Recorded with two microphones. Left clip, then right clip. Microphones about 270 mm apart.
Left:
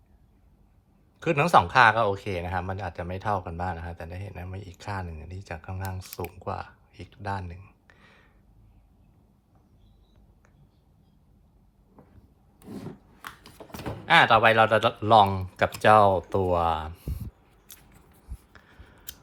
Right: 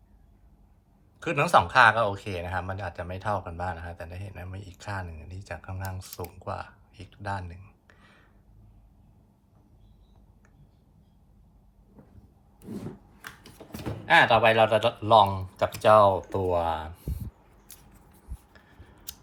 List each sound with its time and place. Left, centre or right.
1.2 s speech: centre
14.0 s speech: left
15.8 s speech: left
16.0 s speech: left
16.5 s a sound: left